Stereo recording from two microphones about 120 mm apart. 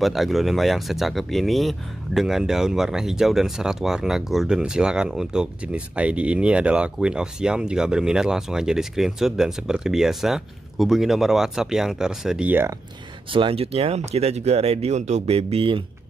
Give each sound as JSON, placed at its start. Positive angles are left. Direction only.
{"t": 0.0, "sound": "speech", "side_deg": 0}
{"t": 13.3, "sound": "speech", "side_deg": -50}